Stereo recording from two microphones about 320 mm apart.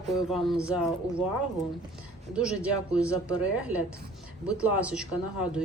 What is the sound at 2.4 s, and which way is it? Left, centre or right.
A woman's voice, centre.